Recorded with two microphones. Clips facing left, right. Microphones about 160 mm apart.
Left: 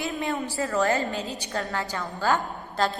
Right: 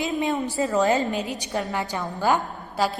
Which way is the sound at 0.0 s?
20° right (ahead or behind).